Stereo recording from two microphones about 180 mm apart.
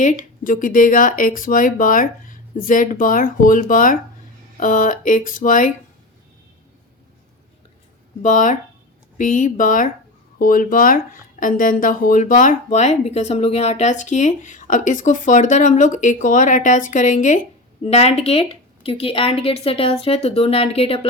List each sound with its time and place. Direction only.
0.0 s speech: 45° left (ahead or behind)
8.2 s a woman's voice: 45° left (ahead or behind)